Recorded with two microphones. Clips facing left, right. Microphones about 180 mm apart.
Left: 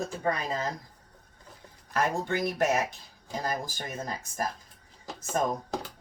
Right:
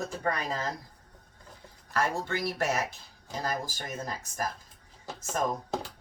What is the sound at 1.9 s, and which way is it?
Speech, 15° left (ahead or behind).